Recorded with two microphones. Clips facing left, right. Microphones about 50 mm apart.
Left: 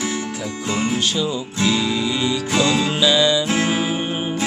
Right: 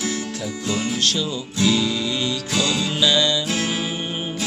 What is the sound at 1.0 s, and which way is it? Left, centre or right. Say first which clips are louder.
Music: left 2 dB; centre.